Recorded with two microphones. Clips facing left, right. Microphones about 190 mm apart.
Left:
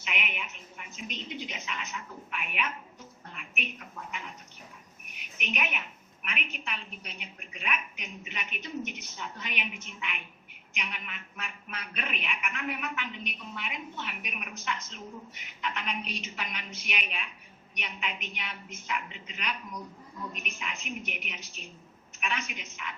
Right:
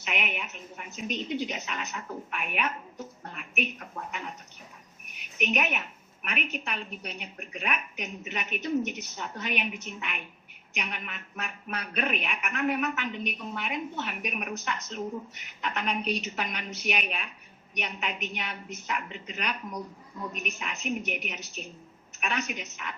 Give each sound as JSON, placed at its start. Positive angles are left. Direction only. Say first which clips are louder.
{"t": 0.0, "sound": "a man's voice", "louder": "right 4 dB", "side_deg": -40}
{"t": 5.5, "sound": "a man's voice", "louder": "right 4 dB", "side_deg": -40}